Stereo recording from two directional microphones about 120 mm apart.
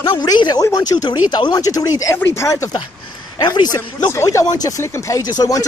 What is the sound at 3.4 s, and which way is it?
Speech, 35° left (ahead or behind).